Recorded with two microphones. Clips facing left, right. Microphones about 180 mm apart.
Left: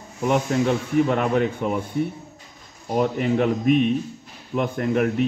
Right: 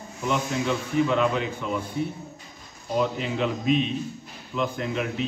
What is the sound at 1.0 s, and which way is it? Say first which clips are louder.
Speech: left 3 dB; 50° left (ahead or behind).